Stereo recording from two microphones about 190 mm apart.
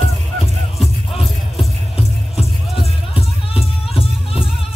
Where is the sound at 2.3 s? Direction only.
30° left (ahead or behind).